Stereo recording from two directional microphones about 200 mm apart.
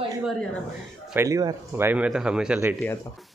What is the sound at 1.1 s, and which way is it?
Speech, 15° right (ahead or behind).